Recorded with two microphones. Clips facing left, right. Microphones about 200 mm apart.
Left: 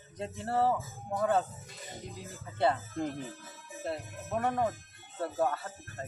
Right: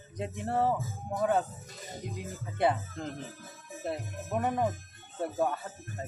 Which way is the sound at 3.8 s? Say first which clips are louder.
Right 1 dB; 15° right (ahead or behind).